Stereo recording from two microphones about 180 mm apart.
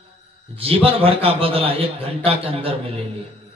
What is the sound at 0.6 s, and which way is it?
A man's voice, 30° right (ahead or behind).